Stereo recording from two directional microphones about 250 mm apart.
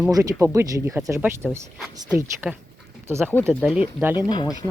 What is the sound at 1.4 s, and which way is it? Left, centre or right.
Speech, centre.